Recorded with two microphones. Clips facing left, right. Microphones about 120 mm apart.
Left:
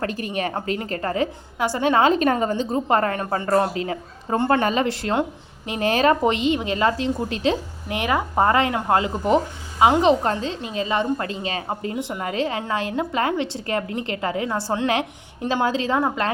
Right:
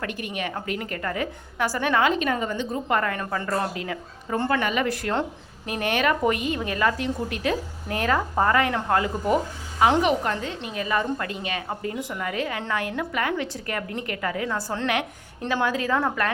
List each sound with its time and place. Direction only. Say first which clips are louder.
0.0 s a woman's voice: left 5 dB; 35° left (ahead or behind)
2.1 s a woman's voice: left 5 dB; 40° left (ahead or behind)
4.4 s a woman's voice: left 5 dB; 45° left (ahead or behind)
4.7 s a woman's voice: left 3 dB; 30° left (ahead or behind)